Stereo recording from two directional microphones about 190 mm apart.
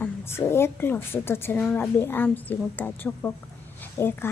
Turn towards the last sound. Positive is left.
turn(degrees=10)  # may be behind; listen again after turning